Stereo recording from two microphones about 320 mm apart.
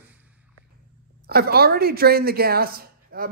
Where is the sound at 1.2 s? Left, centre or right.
Right.